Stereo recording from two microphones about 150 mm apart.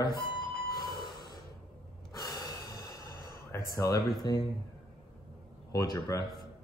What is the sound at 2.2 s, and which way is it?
Breathing, 25° left (ahead or behind).